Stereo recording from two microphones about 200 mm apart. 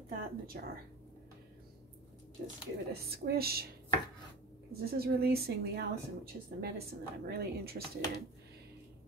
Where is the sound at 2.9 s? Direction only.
50° right (ahead or behind).